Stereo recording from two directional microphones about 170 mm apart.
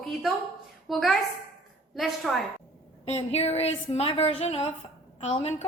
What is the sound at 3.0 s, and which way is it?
A woman's voice, 40° left (ahead or behind).